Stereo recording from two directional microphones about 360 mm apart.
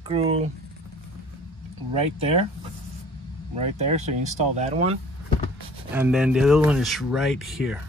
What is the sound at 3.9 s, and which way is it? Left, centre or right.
Speech, centre.